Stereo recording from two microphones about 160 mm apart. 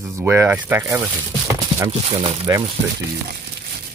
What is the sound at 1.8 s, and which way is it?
Speech, 35° right (ahead or behind).